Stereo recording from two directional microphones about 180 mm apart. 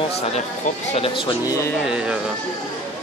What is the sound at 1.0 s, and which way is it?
Speech, 30° left (ahead or behind).